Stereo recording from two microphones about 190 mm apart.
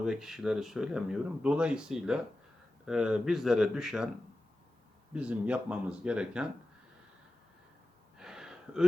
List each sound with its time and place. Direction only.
0.0 s speech: centre (ahead or behind)
5.1 s speech: 5° right (ahead or behind)
8.2 s gasp: 5° right (ahead or behind)